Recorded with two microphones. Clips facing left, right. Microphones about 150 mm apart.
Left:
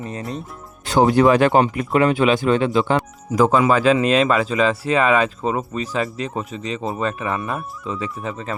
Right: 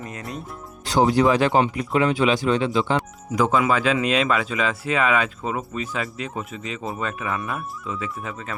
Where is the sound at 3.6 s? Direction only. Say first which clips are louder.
Left 5 dB; 40° left (ahead or behind).